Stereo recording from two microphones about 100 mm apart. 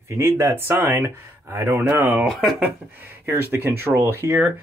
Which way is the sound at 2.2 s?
Centre (ahead or behind).